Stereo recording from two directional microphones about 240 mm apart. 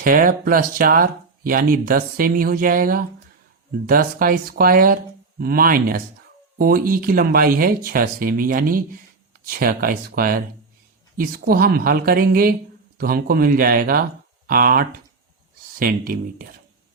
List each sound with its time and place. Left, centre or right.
0.0 s speech: right